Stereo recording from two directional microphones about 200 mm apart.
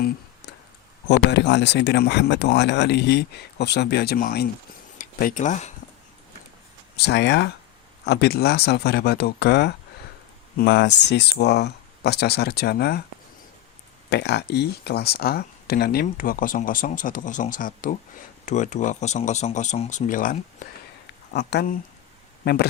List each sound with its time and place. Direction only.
1.0 s speech: 60° left (ahead or behind); by 5.7 s 35° left (ahead or behind)
6.9 s speech: 55° left (ahead or behind)
14.1 s speech: 55° left (ahead or behind)
21.3 s speech: 55° left (ahead or behind)